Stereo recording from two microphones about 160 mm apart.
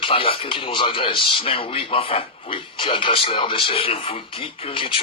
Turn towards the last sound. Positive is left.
turn(degrees=35)  # may be behind; listen again after turning